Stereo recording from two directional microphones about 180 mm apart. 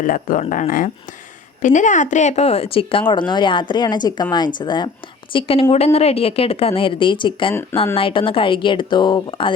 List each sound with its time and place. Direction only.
0.0 s speech: 50° left (ahead or behind)
1.6 s speech: 45° left (ahead or behind); by 9.5 s 25° left (ahead or behind)